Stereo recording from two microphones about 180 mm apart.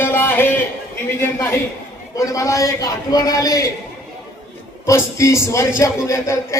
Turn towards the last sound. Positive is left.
turn(degrees=15)  # may be behind; listen again after turning